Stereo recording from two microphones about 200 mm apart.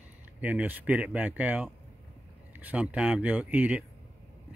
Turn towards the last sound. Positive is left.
turn(degrees=-10)  # may be behind; listen again after turning